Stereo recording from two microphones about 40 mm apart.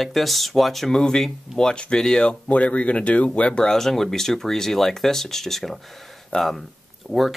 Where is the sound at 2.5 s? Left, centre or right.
Left.